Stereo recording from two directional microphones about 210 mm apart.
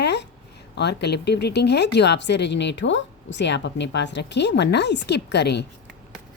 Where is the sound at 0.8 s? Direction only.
55° left (ahead or behind).